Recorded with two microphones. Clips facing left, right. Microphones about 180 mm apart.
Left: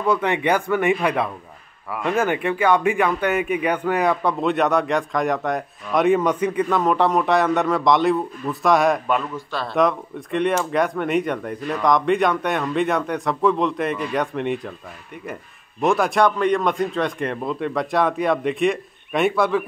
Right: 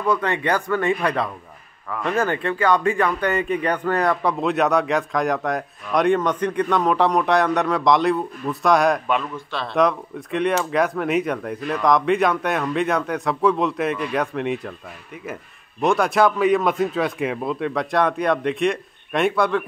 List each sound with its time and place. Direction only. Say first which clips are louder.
0.1 s speech: left 2 dB; 15° left (ahead or behind); by 14.7 s centre (ahead or behind)
15.8 s speech: even; centre (ahead or behind)